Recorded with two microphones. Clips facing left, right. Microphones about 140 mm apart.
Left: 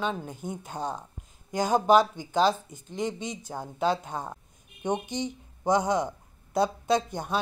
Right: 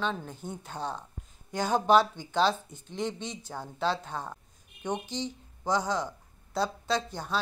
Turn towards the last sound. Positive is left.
turn(degrees=15)  # may be behind; listen again after turning